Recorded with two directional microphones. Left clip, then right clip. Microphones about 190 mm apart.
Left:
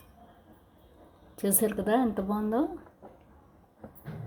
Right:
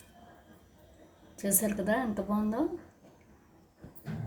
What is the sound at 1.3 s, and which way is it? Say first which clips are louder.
A woman's voice: left 4 dB; 50° left (ahead or behind).